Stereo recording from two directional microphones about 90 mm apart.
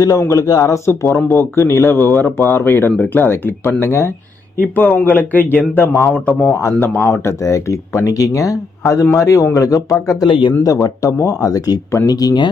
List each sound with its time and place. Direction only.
0.0 s speech: 35° left (ahead or behind)
1.0 s speech: 25° left (ahead or behind)
4.7 s speech: 20° left (ahead or behind)
6.1 s speech: 15° left (ahead or behind)
7.0 s speech: 25° left (ahead or behind)
10.2 s speech: 65° left (ahead or behind)
10.6 s speech: 40° left (ahead or behind)